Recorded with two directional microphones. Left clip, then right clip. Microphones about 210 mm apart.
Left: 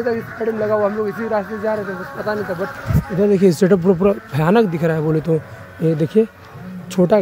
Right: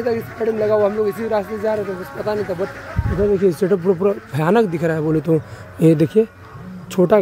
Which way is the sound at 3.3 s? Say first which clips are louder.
Left 2 dB; 15° left (ahead or behind).